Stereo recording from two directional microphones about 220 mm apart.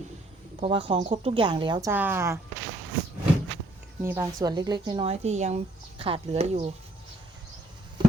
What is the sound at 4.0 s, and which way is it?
A woman's voice, 10° right (ahead or behind).